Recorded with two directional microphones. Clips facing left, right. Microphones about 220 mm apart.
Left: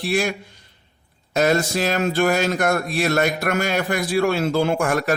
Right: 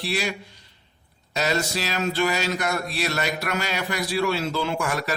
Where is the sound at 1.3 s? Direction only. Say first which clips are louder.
Left 6 dB; 50° left (ahead or behind).